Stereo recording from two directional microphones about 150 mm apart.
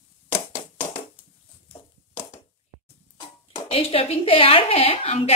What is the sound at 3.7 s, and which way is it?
A woman's voice, 40° left (ahead or behind).